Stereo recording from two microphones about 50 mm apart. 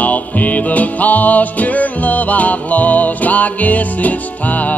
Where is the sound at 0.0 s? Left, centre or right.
Left.